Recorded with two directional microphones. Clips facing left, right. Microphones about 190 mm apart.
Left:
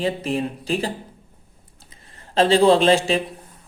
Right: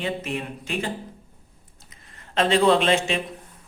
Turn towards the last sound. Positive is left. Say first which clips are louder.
# left 4 dB
turn(degrees=35)  # may be behind; listen again after turning